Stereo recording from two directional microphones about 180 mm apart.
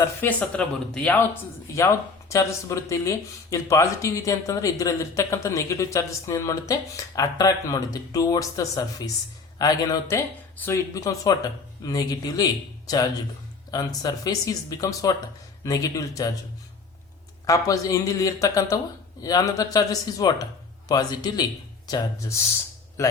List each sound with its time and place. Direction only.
0.2 s speech: 10° left (ahead or behind)
13.7 s speech: 20° left (ahead or behind)
17.4 s speech: 20° left (ahead or behind)